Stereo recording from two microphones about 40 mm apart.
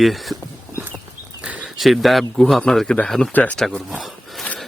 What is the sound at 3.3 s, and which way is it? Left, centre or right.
Speech, left.